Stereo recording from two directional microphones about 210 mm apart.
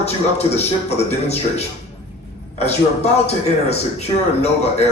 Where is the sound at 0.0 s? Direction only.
30° left (ahead or behind).